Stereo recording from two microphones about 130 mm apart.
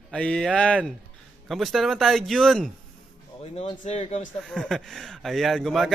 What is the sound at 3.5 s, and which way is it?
Speech, 55° left (ahead or behind).